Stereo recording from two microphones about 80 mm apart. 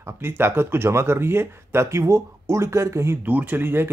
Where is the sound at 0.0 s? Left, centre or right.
Right.